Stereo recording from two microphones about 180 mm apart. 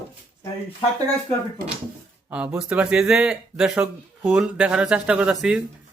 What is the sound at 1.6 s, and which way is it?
Speech, 55° right (ahead or behind).